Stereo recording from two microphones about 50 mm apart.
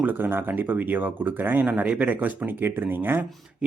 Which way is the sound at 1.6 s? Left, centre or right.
Right.